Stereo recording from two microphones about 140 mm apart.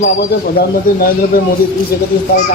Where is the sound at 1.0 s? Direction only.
90° left.